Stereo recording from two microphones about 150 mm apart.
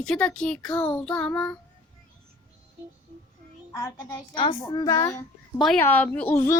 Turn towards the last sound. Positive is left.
turn(degrees=15)  # may be behind; listen again after turning